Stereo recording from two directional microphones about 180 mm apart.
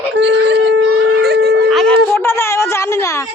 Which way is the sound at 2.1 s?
15° left (ahead or behind).